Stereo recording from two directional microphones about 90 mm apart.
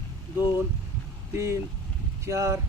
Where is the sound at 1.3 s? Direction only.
30° right (ahead or behind).